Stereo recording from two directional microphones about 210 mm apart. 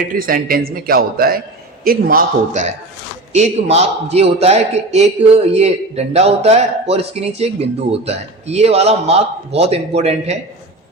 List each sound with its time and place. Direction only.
0.2 s a man's voice: 40° right (ahead or behind)